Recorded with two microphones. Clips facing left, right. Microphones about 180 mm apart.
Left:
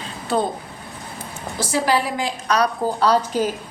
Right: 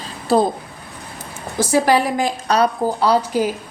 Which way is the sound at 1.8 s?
50° right (ahead or behind).